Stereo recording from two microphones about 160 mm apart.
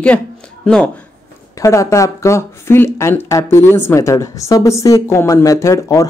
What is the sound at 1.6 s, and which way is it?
Speech, 20° left (ahead or behind).